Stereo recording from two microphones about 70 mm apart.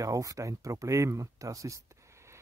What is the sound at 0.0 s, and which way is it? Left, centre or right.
Speech, right.